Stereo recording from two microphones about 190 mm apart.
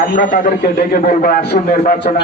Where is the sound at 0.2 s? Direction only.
45° left (ahead or behind).